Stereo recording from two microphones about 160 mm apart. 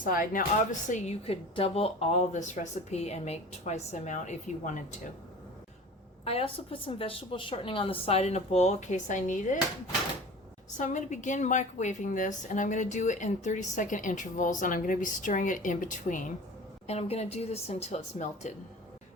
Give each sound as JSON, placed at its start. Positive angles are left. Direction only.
{"t": 0.0, "sound": "a woman's voice", "side_deg": 60}
{"t": 6.2, "sound": "a woman's voice", "side_deg": 35}
{"t": 10.8, "sound": "a woman's voice", "side_deg": 50}
{"t": 16.8, "sound": "a woman's voice", "side_deg": 40}